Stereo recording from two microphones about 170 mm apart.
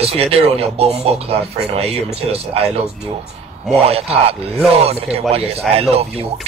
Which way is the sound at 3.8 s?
35° right (ahead or behind).